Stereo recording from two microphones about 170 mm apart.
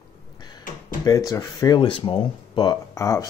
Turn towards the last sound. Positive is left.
turn(degrees=20)  # may be behind; listen again after turning